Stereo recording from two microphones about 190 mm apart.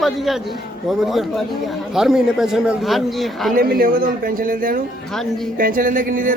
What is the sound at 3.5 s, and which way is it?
A man's voice, 50° right (ahead or behind).